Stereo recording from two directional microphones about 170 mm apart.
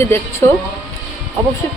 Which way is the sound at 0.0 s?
15° left (ahead or behind).